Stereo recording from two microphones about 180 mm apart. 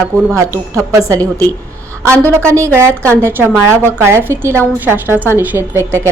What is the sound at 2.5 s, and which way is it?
A woman's voice, 15° right (ahead or behind).